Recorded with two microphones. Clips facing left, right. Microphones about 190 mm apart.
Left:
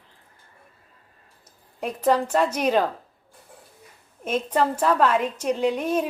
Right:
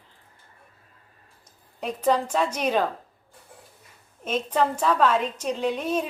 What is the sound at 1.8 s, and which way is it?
A woman's voice, 10° left (ahead or behind).